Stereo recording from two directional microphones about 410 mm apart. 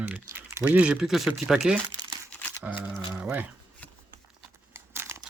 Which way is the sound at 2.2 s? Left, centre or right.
Centre.